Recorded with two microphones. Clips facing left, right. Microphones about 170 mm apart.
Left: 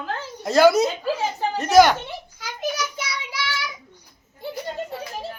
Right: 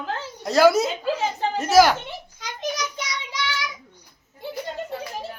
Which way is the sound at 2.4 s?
5° left (ahead or behind).